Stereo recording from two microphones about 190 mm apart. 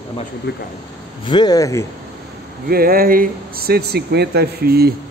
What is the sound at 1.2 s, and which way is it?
Speech, 20° left (ahead or behind).